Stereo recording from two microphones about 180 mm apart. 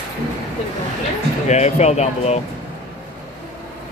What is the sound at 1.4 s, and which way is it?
Speech, 40° left (ahead or behind).